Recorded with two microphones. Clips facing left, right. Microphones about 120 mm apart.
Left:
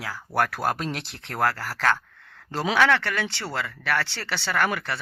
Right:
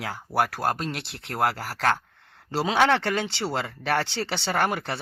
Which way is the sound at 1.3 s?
15° right (ahead or behind).